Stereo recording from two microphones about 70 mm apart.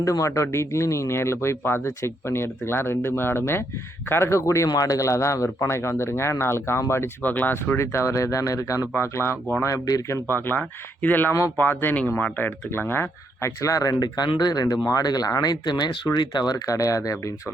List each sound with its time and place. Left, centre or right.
0.0 s speech: left
4.7 s speech: left
7.3 s speech: left
9.0 s speech: left
9.7 s speech: left
10.2 s speech: left
13.6 s speech: left
16.6 s speech: left